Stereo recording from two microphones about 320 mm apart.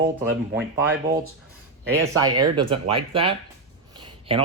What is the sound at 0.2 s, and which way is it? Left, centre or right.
Speech, centre.